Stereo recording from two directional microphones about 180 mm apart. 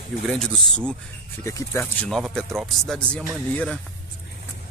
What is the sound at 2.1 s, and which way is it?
Speech, centre (ahead or behind).